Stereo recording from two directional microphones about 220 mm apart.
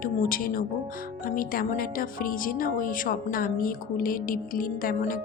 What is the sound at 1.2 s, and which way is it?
Speech, 40° left (ahead or behind).